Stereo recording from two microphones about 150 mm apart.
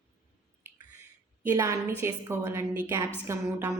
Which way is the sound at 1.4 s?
15° right (ahead or behind).